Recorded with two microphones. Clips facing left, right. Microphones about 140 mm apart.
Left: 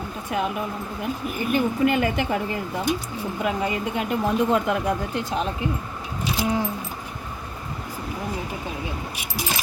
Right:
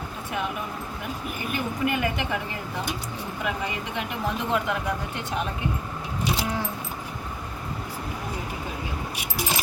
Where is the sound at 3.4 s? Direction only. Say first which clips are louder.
Left 6 dB; 40° left (ahead or behind).